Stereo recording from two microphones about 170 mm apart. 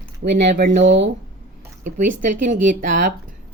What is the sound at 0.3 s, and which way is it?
Speech, 60° right (ahead or behind).